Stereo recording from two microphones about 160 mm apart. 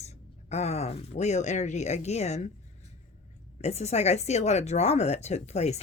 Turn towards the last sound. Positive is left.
turn(degrees=45)  # may be behind; listen again after turning